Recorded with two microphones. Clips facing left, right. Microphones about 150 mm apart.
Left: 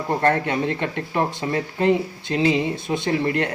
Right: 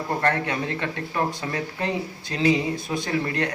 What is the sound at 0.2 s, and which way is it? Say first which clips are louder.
Speech: left 5 dB; 30° left (ahead or behind).